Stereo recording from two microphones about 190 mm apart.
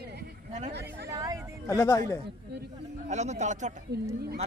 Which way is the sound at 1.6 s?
15° left (ahead or behind).